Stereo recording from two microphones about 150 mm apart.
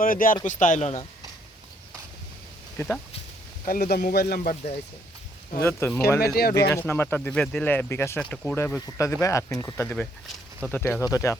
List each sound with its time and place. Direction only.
0.0 s speech: 65° left (ahead or behind); by 1.0 s 50° left (ahead or behind)
2.7 s speech: 10° left (ahead or behind)
3.7 s speech: 85° left
5.5 s speech: 15° left (ahead or behind)
6.2 s speech: 90° left
6.7 s speech: 15° left (ahead or behind)
8.2 s speech: 5° left (ahead or behind)
8.5 s speech: 15° left (ahead or behind)
9.8 s speech: 10° left (ahead or behind)